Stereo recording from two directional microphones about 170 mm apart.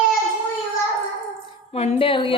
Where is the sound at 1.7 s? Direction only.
35° left (ahead or behind).